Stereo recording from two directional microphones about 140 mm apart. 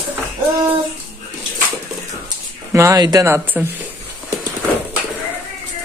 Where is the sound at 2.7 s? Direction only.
20° right (ahead or behind).